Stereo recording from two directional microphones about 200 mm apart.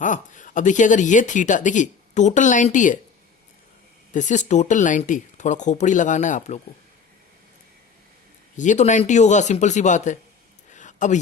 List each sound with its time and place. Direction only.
0.0 s speech: 40° left (ahead or behind)
4.1 s speech: 35° left (ahead or behind)
8.5 s speech: 40° left (ahead or behind)
10.7 s a sound: 40° left (ahead or behind)